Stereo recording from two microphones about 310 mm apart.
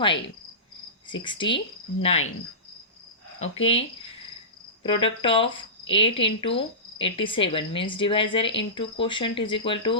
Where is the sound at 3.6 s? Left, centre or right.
Centre.